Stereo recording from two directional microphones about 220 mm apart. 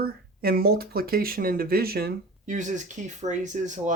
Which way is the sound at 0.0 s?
45° right (ahead or behind).